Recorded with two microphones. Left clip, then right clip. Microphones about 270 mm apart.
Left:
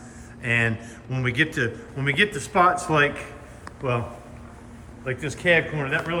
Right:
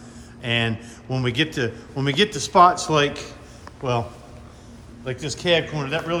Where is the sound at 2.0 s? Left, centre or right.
Centre.